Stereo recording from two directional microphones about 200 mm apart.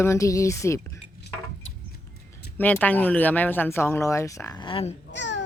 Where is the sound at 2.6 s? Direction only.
10° left (ahead or behind); by 4.9 s 30° left (ahead or behind).